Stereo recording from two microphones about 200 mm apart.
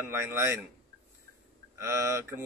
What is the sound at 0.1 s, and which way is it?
Speech, 10° right (ahead or behind).